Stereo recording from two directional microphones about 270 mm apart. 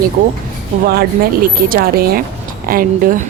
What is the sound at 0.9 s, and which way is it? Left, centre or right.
A woman's voice, right.